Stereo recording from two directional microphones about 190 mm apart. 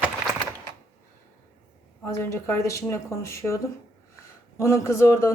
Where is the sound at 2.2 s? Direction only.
15° left (ahead or behind).